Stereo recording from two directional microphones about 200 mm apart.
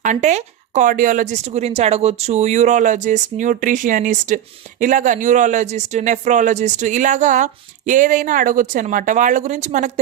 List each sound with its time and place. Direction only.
0.0 s speech: 35° right (ahead or behind)